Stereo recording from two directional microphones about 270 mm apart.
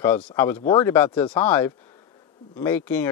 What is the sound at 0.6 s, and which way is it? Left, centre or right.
Speech, centre.